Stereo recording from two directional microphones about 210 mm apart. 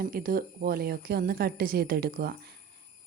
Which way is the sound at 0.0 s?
45° right (ahead or behind).